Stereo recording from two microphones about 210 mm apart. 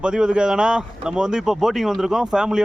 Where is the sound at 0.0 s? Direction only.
5° right (ahead or behind).